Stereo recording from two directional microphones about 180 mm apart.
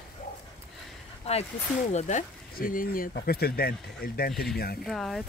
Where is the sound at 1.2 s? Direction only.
35° left (ahead or behind); by 4.8 s 60° left (ahead or behind).